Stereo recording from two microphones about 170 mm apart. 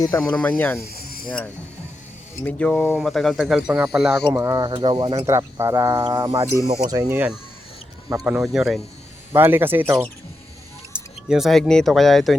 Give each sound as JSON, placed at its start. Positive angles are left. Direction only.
{"t": 0.2, "sound": "speech", "side_deg": 5}
{"t": 0.8, "sound": "cricket", "side_deg": 60}
{"t": 2.4, "sound": "speech", "side_deg": 10}
{"t": 4.3, "sound": "speech", "side_deg": -20}
{"t": 8.2, "sound": "speech", "side_deg": -5}
{"t": 10.9, "sound": "speech", "side_deg": -5}